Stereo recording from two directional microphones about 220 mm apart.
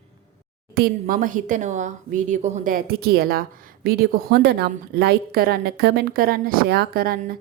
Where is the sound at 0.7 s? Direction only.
40° right (ahead or behind).